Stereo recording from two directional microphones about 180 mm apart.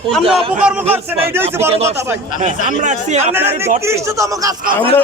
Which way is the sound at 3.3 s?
10° right (ahead or behind).